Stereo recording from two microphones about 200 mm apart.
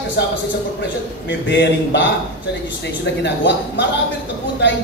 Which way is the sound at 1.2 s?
65° left (ahead or behind).